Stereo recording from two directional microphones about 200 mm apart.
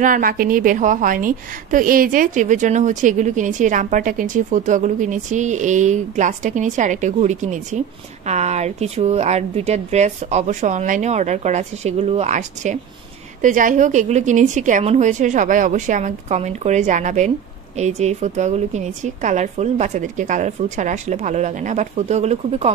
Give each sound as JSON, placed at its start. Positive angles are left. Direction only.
{"t": 0.0, "sound": "a woman's voice", "side_deg": -45}